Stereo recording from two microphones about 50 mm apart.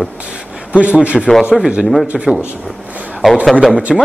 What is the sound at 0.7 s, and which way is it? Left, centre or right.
Speech, right.